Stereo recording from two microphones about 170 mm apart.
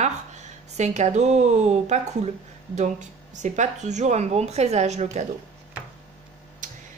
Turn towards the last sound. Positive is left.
turn(degrees=-50)  # may be behind; listen again after turning